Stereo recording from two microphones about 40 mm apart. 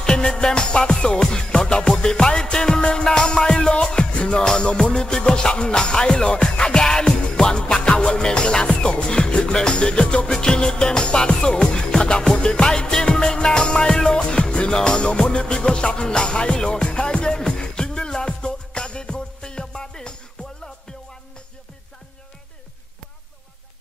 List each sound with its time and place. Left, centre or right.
0.0 s music: centre
10.3 s music: centre